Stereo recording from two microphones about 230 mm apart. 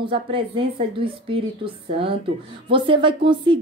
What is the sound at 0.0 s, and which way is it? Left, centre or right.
Speech, right.